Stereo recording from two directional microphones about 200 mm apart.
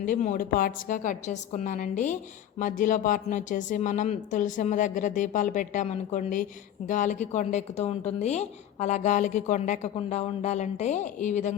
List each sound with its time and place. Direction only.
0.0 s a woman's voice: 40° left (ahead or behind)